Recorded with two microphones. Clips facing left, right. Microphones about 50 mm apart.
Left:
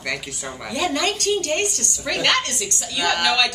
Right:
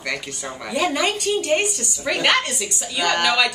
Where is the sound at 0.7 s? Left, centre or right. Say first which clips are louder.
Right 1 dB; centre.